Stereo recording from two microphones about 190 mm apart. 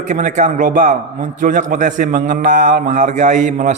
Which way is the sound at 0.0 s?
40° right (ahead or behind).